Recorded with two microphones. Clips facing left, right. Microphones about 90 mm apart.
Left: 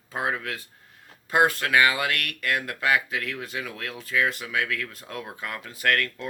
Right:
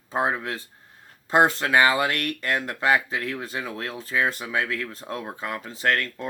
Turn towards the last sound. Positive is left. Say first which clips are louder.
# right 1 dB
turn(degrees=-25)  # may be behind; listen again after turning